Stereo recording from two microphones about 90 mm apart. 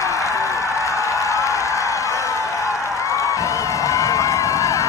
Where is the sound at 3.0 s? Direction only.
35° left (ahead or behind).